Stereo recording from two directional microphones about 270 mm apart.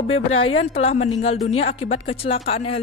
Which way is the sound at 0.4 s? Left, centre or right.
Left.